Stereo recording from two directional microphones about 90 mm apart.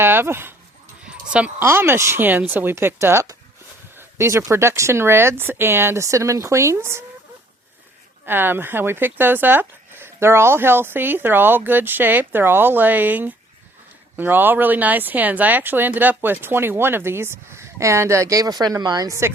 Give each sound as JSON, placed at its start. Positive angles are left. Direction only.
{"t": 0.0, "sound": "speech", "side_deg": -25}
{"t": 1.0, "sound": "dog", "side_deg": -15}
{"t": 1.6, "sound": "speech", "side_deg": -25}
{"t": 8.3, "sound": "speech", "side_deg": -25}